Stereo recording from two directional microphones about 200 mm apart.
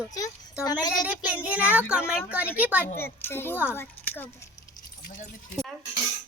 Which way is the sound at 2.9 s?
10° left (ahead or behind).